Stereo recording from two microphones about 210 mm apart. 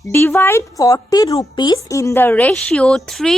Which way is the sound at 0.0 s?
10° left (ahead or behind).